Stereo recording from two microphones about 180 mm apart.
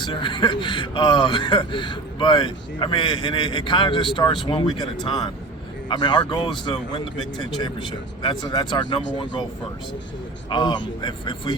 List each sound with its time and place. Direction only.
0.0 s speech: 25° left (ahead or behind)
10.5 s speech: 25° left (ahead or behind)